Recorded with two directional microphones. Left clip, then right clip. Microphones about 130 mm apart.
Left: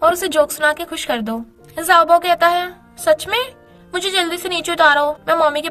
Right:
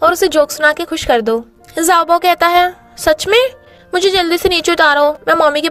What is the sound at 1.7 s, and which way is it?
A woman's voice, 70° right (ahead or behind).